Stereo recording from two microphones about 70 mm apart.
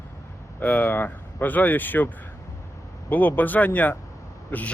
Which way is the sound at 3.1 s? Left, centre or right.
Left.